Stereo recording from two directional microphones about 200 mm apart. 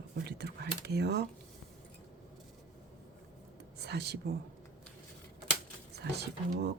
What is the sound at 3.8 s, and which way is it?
Speech, 55° right (ahead or behind).